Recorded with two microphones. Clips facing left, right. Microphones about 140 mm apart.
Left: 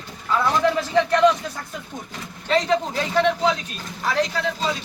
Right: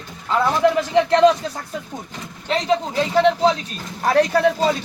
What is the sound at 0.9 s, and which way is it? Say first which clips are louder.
Speech: right 2 dB; 30° right (ahead or behind).